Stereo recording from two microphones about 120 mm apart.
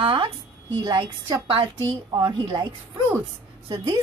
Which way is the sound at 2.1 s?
30° right (ahead or behind).